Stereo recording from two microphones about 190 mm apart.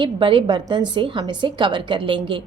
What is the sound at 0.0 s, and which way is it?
A woman's voice, 25° right (ahead or behind).